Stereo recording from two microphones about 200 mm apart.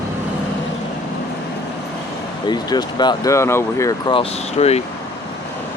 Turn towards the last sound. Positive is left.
turn(degrees=30)  # may be behind; listen again after turning